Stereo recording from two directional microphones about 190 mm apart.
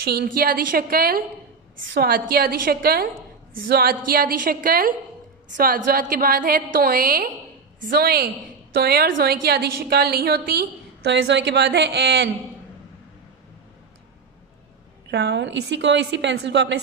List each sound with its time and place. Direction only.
0.0 s a woman's voice: 55° right (ahead or behind)
15.0 s a woman's voice: 65° right (ahead or behind)